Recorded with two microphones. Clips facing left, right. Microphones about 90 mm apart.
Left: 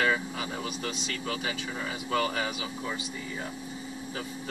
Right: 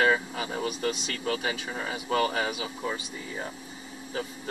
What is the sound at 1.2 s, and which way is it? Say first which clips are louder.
Speech: right 5 dB; 40° right (ahead or behind).